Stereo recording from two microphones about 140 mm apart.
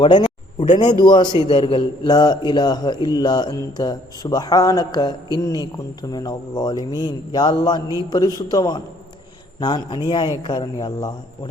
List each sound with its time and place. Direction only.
0.0 s a man's voice: 35° left (ahead or behind)